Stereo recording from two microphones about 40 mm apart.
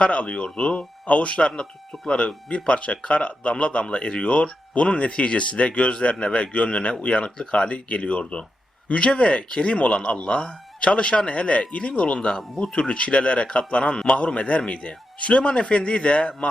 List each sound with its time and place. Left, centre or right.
0.0 s a man's voice: left